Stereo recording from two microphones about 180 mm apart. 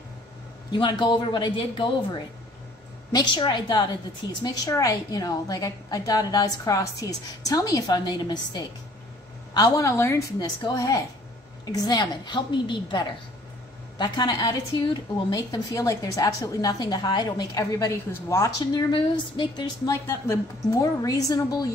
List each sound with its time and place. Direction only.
0.7 s a woman's voice: 25° left (ahead or behind)
3.1 s a woman's voice: 25° left (ahead or behind)